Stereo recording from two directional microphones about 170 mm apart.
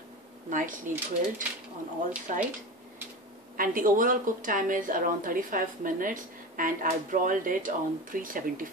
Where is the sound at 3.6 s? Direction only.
55° right (ahead or behind).